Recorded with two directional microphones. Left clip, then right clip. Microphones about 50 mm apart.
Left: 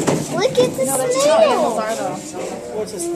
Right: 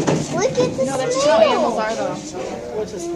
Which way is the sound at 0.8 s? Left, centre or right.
Right.